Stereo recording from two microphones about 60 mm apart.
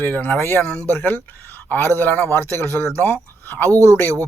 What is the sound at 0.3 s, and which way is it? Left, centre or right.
Speech, left.